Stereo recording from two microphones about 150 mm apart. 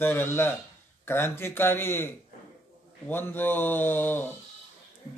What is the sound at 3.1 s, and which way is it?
A man's voice, 15° left (ahead or behind).